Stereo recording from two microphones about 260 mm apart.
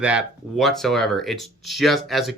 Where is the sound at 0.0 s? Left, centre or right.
Centre.